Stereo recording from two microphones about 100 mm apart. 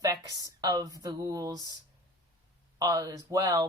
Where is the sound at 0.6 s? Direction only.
40° right (ahead or behind).